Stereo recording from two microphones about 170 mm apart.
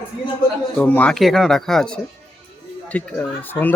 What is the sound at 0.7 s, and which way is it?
A man's voice, 10° left (ahead or behind).